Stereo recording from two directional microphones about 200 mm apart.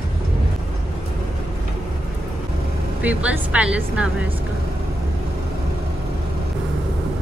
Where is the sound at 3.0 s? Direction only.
5° right (ahead or behind).